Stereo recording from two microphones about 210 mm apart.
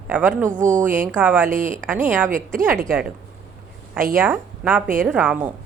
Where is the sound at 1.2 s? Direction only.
10° right (ahead or behind).